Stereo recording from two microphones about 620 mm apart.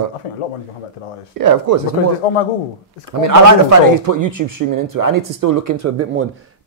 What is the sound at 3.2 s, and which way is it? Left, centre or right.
Speech, right.